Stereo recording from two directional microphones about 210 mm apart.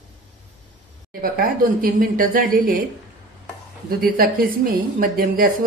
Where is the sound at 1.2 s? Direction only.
45° right (ahead or behind).